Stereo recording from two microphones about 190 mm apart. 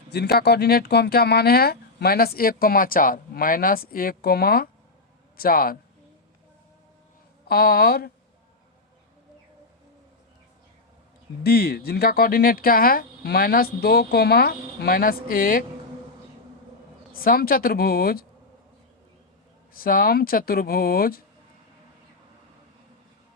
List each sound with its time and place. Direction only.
0.1 s speech: 55° left (ahead or behind)
7.4 s speech: 50° left (ahead or behind)
11.4 s speech: 55° left (ahead or behind)
17.1 s speech: 50° left (ahead or behind)
19.7 s speech: 50° left (ahead or behind)